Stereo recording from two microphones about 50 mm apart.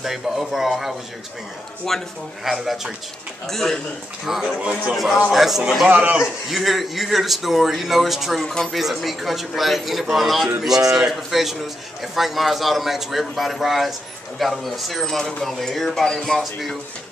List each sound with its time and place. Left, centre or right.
0.0 s speech: centre
1.9 s speech: centre
3.4 s speech: centre
4.3 s speech: centre
4.6 s speech: centre
4.9 s speech: centre
5.9 s a man's voice: right
6.1 s speech: centre